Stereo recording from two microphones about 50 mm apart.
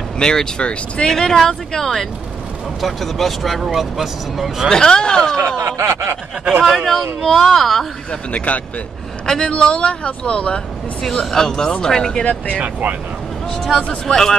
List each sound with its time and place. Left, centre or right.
0.2 s speech: centre
1.1 s speech: centre
4.6 s speech: centre
5.6 s snicker: right
6.6 s speech: centre
8.3 s speech: left
9.2 s speech: centre
11.1 s speech: centre
12.5 s speech: right
13.5 s speech: centre